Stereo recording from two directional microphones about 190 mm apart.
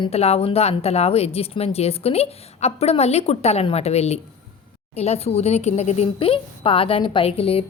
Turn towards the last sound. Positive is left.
turn(degrees=30)  # may be behind; listen again after turning